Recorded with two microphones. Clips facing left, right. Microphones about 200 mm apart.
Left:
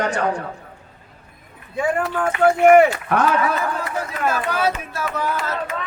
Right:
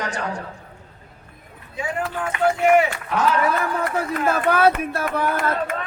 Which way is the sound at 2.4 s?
55° left (ahead or behind).